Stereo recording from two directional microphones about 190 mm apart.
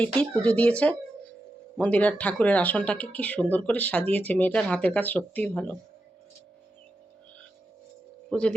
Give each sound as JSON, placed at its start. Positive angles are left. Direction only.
{"t": 0.0, "sound": "speech", "side_deg": 5}
{"t": 8.3, "sound": "speech", "side_deg": 5}